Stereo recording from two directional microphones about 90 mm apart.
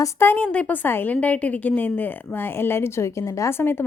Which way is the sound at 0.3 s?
15° left (ahead or behind).